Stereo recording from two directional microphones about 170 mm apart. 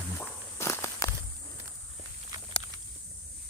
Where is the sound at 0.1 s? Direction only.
Centre (ahead or behind).